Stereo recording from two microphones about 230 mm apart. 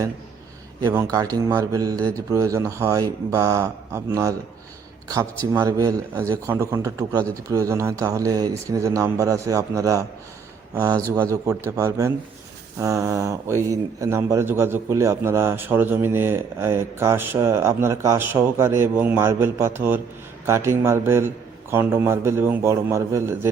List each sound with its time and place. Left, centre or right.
0.8 s a man's voice: centre